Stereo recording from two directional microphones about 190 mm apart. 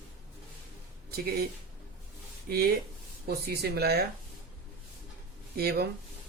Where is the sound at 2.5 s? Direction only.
55° right (ahead or behind).